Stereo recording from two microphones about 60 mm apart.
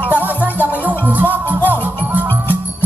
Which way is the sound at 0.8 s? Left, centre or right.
Right.